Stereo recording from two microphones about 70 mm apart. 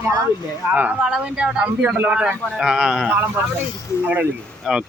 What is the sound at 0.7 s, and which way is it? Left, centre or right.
Speech, right.